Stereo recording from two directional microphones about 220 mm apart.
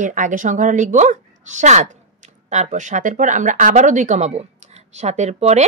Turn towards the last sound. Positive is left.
turn(degrees=-30)  # may be behind; listen again after turning